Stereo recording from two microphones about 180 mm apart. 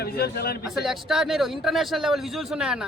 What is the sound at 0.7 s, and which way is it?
A man's voice, centre (ahead or behind).